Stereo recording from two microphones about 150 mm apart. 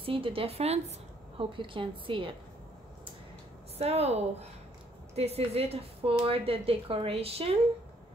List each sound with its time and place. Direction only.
0.0 s speech: 35° right (ahead or behind)
3.7 s a woman's voice: 45° right (ahead or behind)